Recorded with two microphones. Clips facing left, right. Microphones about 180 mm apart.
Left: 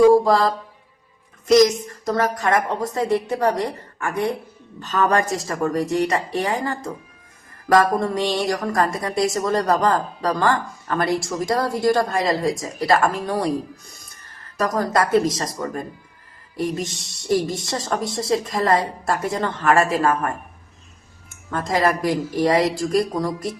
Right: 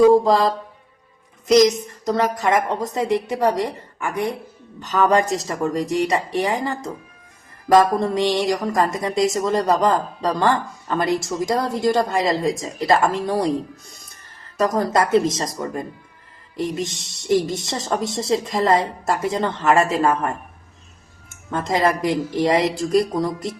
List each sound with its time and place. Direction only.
0.1 s a woman's voice: 20° right (ahead or behind)
14.6 s a woman's voice: 25° right (ahead or behind)
21.5 s a woman's voice: 20° right (ahead or behind)